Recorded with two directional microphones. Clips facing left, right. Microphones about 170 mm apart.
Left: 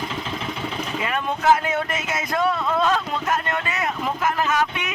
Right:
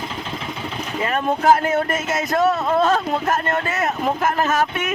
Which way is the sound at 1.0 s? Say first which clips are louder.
Right 3 dB; 40° right (ahead or behind).